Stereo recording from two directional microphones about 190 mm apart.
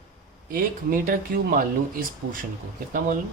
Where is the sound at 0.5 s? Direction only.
50° right (ahead or behind).